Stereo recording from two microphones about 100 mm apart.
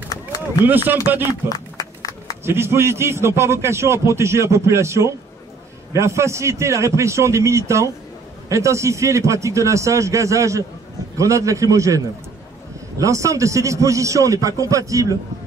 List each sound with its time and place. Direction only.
0.7 s a man's voice: 20° right (ahead or behind)
1.5 s a sound: 35° left (ahead or behind)
2.4 s a man's voice: 25° right (ahead or behind)